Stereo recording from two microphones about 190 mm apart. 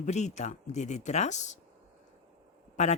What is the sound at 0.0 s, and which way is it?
Speech, 35° left (ahead or behind).